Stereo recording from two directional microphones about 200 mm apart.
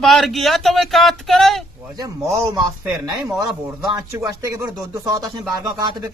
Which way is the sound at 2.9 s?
20° right (ahead or behind).